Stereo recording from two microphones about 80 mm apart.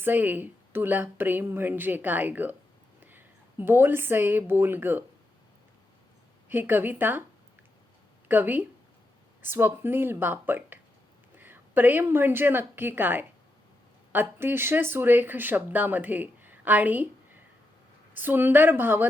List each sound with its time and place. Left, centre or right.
0.0 s a woman's voice: right
6.5 s a woman's voice: right
8.3 s a woman's voice: right